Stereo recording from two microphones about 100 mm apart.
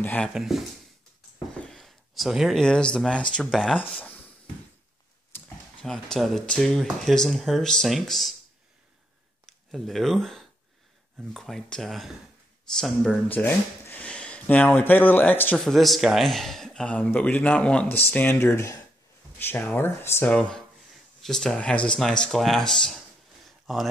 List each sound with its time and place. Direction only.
0.0 s speech: 15° left (ahead or behind)
0.3 s speech: 5° right (ahead or behind)
4.0 s a sound: 20° left (ahead or behind)
5.8 s speech: 5° left (ahead or behind)
9.5 s speech: centre (ahead or behind)
13.3 s speech: 20° left (ahead or behind)
15.6 s speech: centre (ahead or behind); by 18.5 s 15° left (ahead or behind)
18.5 s speech: 30° left (ahead or behind)
20.3 s speech: 10° left (ahead or behind)
20.9 s a sound: centre (ahead or behind)
21.5 s speech: 10° left (ahead or behind)